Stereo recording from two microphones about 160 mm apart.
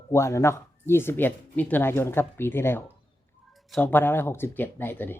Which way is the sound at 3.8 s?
10° left (ahead or behind).